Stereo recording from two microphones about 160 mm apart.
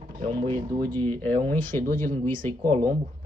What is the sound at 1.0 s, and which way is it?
Speech, 10° left (ahead or behind).